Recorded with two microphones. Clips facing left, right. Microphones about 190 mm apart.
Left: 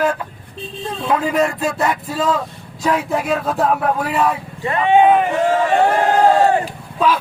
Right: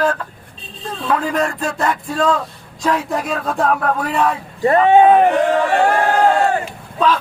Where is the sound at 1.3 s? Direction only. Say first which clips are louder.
Left 2 dB; 10° left (ahead or behind).